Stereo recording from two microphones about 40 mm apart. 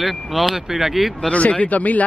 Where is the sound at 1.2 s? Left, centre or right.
Left.